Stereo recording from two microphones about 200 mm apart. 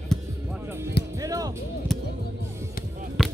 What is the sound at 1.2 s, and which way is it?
Music, 15° right (ahead or behind).